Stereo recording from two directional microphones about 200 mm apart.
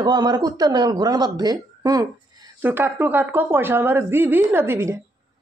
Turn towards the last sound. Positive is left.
turn(degrees=-10)  # may be behind; listen again after turning